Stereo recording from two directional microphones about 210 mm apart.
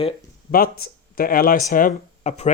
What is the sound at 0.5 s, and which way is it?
Speech, 45° left (ahead or behind).